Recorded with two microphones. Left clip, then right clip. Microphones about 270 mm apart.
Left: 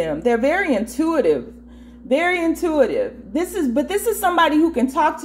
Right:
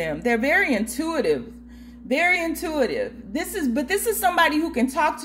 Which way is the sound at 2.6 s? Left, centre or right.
Right.